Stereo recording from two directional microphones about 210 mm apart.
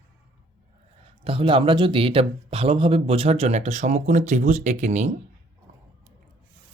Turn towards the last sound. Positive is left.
turn(degrees=-35)  # may be behind; listen again after turning